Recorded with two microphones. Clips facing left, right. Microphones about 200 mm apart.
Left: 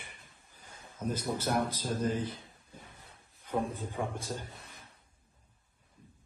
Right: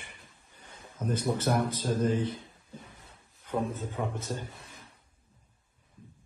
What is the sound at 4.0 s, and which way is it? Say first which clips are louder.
Speech: right 1 dB; 10° left (ahead or behind).